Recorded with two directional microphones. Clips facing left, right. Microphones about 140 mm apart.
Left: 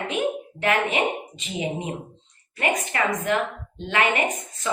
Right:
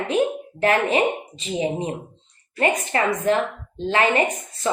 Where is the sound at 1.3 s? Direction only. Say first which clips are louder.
Right 5 dB; 35° right (ahead or behind).